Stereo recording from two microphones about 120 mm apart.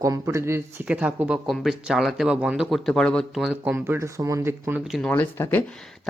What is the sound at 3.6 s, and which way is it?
Speech, 15° right (ahead or behind).